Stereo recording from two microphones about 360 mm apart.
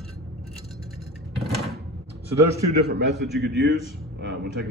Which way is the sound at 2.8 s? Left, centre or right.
Right.